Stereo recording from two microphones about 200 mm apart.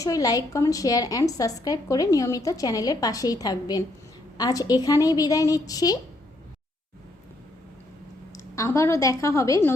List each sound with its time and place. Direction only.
0.0 s a woman's voice: 20° left (ahead or behind)
8.4 s a woman's voice: 15° left (ahead or behind)